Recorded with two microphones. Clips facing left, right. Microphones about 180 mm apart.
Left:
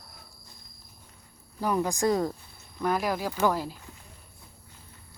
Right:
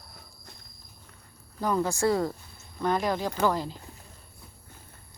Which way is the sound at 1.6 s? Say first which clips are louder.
Even; 15° left (ahead or behind).